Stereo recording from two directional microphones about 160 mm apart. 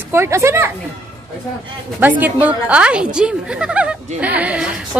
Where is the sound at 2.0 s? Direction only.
10° right (ahead or behind).